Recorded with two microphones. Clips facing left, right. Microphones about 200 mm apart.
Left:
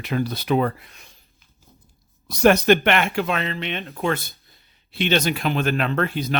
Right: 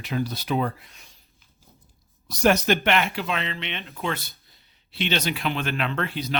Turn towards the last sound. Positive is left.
turn(degrees=50)  # may be behind; listen again after turning